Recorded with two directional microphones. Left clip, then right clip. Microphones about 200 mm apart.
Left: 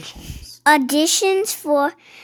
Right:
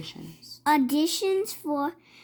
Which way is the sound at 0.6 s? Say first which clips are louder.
Left 8 dB; 25° left (ahead or behind).